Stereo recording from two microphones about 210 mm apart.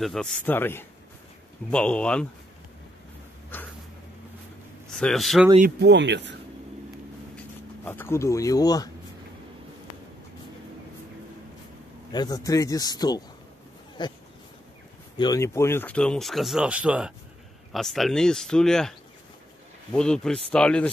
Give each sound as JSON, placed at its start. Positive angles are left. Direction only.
{"t": 0.0, "sound": "speech", "side_deg": 0}
{"t": 3.5, "sound": "a sound", "side_deg": 10}
{"t": 4.9, "sound": "speech", "side_deg": 0}
{"t": 5.8, "sound": "speech", "side_deg": -55}
{"t": 7.3, "sound": "speech", "side_deg": 10}
{"t": 12.1, "sound": "speech", "side_deg": 20}